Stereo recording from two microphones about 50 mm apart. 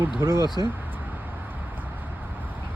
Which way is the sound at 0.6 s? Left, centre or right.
Right.